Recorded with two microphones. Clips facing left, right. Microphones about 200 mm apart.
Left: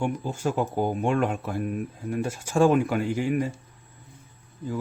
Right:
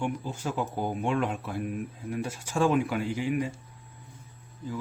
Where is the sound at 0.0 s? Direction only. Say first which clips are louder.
Left 5 dB; 45° left (ahead or behind).